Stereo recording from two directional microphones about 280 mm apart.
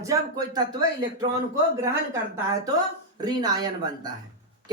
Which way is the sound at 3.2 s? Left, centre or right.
Centre.